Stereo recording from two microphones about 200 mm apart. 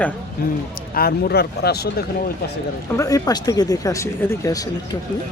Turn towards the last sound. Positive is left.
turn(degrees=15)  # may be behind; listen again after turning